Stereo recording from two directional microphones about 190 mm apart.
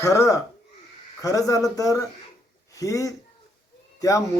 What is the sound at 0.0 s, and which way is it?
Speech, 15° left (ahead or behind).